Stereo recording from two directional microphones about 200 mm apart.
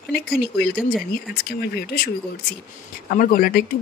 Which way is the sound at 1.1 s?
50° left (ahead or behind).